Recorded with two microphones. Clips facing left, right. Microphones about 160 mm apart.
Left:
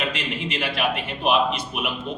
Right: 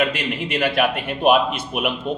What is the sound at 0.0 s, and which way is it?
A man's voice, 60° right (ahead or behind).